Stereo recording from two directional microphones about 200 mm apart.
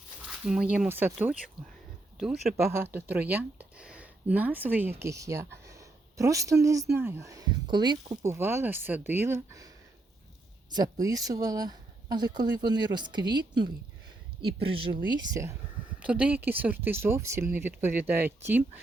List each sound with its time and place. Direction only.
0.2 s speech: 5° right (ahead or behind)
1.6 s speech: 25° right (ahead or behind)
2.1 s speech: centre (ahead or behind)
2.6 s speech: 15° right (ahead or behind)
10.8 s speech: 20° right (ahead or behind)